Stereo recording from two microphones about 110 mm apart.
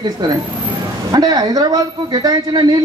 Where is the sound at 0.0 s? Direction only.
40° right (ahead or behind).